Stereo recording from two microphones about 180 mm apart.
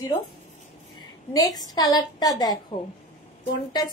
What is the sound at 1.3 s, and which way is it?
A woman's voice, 20° left (ahead or behind).